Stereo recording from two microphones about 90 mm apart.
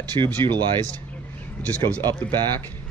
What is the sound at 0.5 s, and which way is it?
Speech, 55° right (ahead or behind).